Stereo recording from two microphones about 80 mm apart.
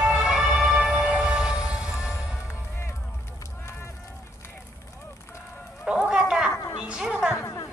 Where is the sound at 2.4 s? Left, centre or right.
Left.